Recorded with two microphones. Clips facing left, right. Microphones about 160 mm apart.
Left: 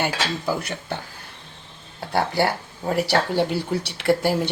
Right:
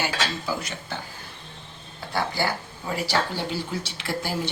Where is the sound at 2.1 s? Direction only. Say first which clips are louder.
Left 5 dB; 65° left (ahead or behind).